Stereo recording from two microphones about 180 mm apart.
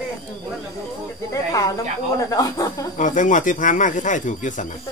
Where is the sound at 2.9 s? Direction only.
45° left (ahead or behind).